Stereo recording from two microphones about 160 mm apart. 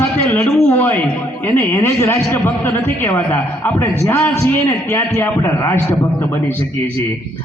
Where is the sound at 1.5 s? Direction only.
15° left (ahead or behind).